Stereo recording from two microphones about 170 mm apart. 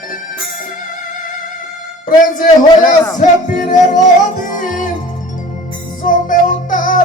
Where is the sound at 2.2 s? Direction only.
50° left (ahead or behind).